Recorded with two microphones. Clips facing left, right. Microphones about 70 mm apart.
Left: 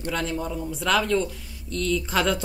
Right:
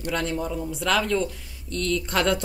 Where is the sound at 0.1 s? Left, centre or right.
Centre.